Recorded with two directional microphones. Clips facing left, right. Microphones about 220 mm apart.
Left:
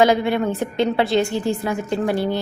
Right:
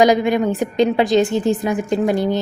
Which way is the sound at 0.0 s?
15° right (ahead or behind).